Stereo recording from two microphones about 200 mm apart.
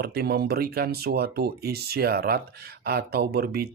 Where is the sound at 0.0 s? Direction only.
50° right (ahead or behind).